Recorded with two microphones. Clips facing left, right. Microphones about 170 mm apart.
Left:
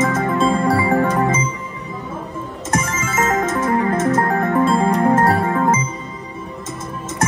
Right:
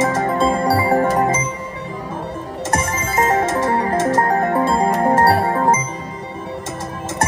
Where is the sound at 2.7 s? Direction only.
30° right (ahead or behind).